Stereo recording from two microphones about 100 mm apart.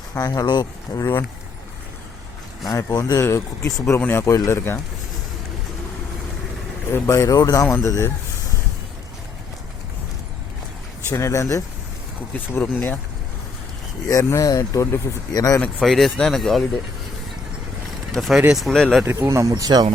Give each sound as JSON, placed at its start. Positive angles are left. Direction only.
{"t": 0.1, "sound": "speech", "side_deg": 40}
{"t": 2.6, "sound": "speech", "side_deg": 40}
{"t": 7.1, "sound": "speech", "side_deg": 35}
{"t": 11.1, "sound": "speech", "side_deg": 30}
{"t": 14.1, "sound": "speech", "side_deg": 35}
{"t": 15.6, "sound": "speech", "side_deg": 5}
{"t": 18.1, "sound": "speech", "side_deg": 0}
{"t": 19.0, "sound": "speech", "side_deg": -25}